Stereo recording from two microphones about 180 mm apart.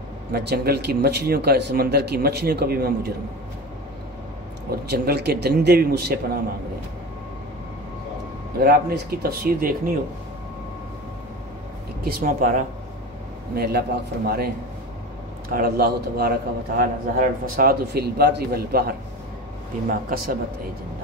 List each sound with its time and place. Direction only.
0.3 s a man's voice: 65° right (ahead or behind)
4.6 s a man's voice: 60° right (ahead or behind)
8.5 s a man's voice: 60° right (ahead or behind)
12.0 s speech: 55° right (ahead or behind)
13.6 s a man's voice: 60° right (ahead or behind)